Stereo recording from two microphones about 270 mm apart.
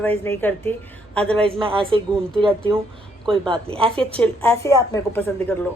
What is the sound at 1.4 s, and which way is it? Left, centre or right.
A woman's voice, centre.